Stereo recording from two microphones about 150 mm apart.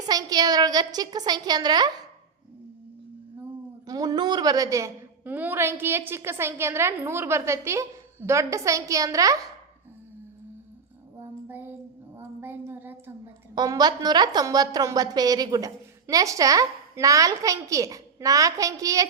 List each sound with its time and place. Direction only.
0.1 s a woman's voice: 25° right (ahead or behind)
3.8 s a woman's voice: 25° right (ahead or behind)
5.2 s a woman's voice: 10° right (ahead or behind)
11.2 s child singing: 15° right (ahead or behind)
12.1 s a sound: 15° right (ahead or behind)
13.6 s a woman's voice: 25° right (ahead or behind)